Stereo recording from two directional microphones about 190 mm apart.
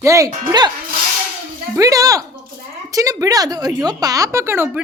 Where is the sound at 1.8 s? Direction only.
20° right (ahead or behind).